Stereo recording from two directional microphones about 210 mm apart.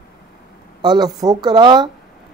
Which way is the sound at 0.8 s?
20° right (ahead or behind).